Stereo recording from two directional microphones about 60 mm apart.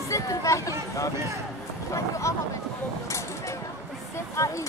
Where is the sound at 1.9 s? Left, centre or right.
Left.